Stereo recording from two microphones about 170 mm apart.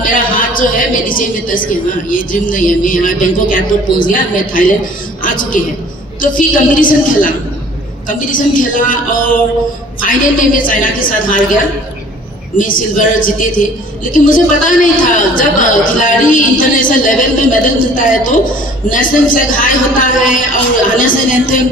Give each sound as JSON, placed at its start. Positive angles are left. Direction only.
{"t": 0.0, "sound": "a woman's voice", "side_deg": 55}
{"t": 12.5, "sound": "a woman's voice", "side_deg": 50}